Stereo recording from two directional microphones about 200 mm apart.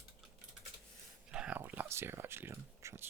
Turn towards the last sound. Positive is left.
turn(degrees=-10)  # may be behind; listen again after turning